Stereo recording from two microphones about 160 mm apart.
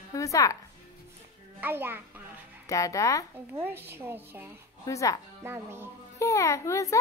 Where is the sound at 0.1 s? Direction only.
20° left (ahead or behind).